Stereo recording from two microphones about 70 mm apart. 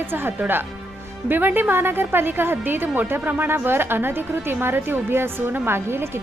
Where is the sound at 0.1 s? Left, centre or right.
Right.